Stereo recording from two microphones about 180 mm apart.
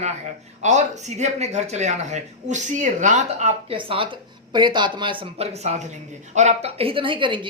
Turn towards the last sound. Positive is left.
turn(degrees=-25)  # may be behind; listen again after turning